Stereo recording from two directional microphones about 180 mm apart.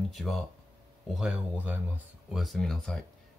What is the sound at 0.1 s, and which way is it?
Speech, centre (ahead or behind).